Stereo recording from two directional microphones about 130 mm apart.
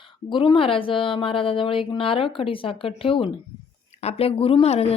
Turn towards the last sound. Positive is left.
turn(degrees=55)  # may be behind; listen again after turning